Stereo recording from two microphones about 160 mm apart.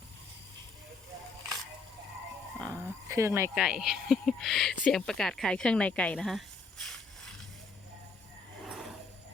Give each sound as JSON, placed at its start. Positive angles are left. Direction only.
{"t": 2.6, "sound": "dog", "side_deg": -20}
{"t": 3.5, "sound": "speech", "side_deg": -5}
{"t": 8.6, "sound": "a sound", "side_deg": 0}